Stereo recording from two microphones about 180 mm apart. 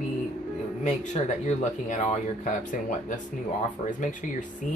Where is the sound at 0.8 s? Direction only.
40° left (ahead or behind).